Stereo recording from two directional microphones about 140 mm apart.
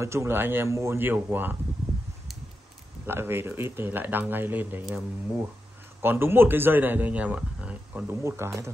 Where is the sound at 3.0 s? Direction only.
15° right (ahead or behind).